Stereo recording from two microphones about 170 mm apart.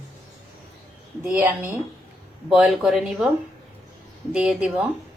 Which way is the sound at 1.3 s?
10° right (ahead or behind).